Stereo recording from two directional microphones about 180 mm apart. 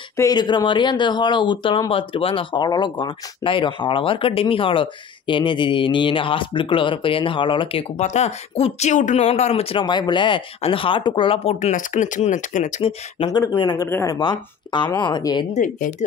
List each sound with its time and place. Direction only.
0.2 s speech: 25° left (ahead or behind); by 12.9 s 45° left (ahead or behind)
13.2 s speech: 20° left (ahead or behind)
15.5 s speech: 45° left (ahead or behind)